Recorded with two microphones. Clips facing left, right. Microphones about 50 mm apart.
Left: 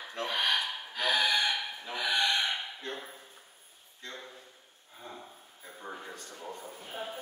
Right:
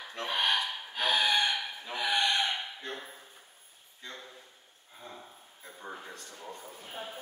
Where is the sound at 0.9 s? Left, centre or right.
Right.